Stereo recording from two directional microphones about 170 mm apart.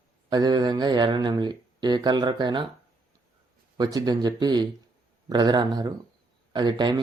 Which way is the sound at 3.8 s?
25° right (ahead or behind).